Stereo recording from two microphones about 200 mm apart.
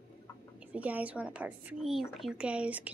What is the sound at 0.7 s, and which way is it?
Speech, 5° right (ahead or behind).